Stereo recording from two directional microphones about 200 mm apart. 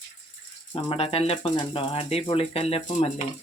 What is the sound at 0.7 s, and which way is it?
Speech, 30° left (ahead or behind).